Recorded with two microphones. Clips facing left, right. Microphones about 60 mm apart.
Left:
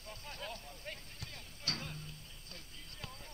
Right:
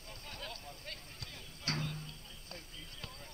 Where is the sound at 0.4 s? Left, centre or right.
Centre.